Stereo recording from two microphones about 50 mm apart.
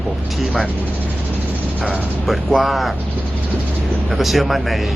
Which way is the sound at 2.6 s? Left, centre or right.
Centre.